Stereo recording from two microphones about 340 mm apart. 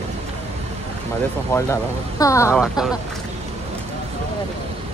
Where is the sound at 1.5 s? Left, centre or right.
Centre.